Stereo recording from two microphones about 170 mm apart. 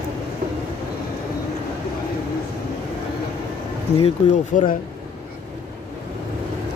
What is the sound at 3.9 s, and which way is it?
Speech, 35° left (ahead or behind).